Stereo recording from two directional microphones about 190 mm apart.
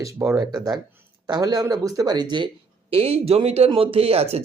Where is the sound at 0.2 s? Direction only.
15° right (ahead or behind).